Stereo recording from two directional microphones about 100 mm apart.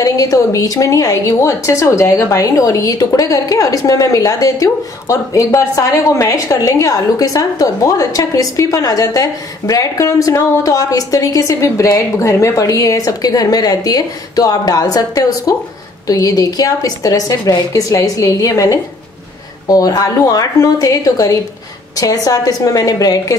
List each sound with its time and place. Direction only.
0.0 s a woman's voice: 35° left (ahead or behind)